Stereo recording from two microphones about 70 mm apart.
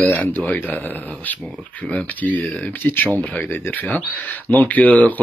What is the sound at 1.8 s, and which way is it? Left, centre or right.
Speech, left.